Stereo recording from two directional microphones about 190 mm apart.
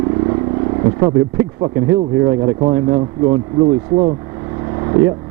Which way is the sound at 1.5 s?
20° right (ahead or behind).